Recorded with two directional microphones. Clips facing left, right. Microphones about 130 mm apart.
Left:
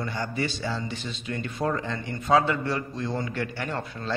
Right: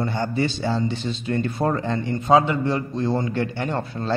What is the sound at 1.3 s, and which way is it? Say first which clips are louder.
Speech: right 5 dB; 40° right (ahead or behind).